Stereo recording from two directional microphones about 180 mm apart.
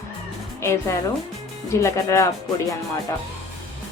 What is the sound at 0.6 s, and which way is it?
Speech, 15° left (ahead or behind).